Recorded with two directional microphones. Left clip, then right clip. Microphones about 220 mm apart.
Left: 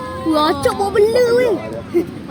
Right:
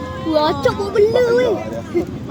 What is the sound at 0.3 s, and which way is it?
Speech, 40° left (ahead or behind).